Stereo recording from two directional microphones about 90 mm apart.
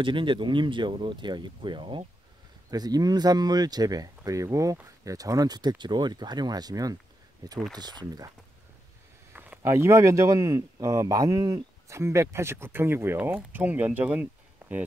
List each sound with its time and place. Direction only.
0.0 s speech: 65° right (ahead or behind)
2.7 s speech: 45° right (ahead or behind)
9.3 s a sound: 20° right (ahead or behind)
9.6 s a man's voice: 30° right (ahead or behind)